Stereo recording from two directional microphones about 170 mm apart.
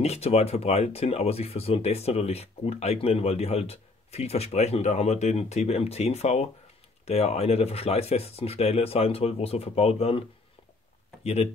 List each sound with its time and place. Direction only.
0.0 s speech: 40° left (ahead or behind)